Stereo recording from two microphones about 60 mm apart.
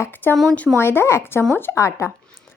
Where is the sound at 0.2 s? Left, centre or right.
Left.